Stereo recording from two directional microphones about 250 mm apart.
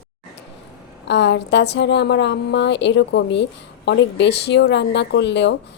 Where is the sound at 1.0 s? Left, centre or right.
Left.